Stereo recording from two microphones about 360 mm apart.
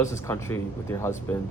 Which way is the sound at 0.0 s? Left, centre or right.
Centre.